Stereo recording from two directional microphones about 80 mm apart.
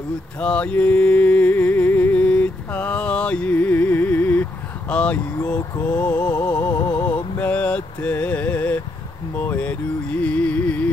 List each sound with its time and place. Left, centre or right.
0.4 s music: centre
6.6 s music: left
7.3 s vehicle: centre
9.4 s music: left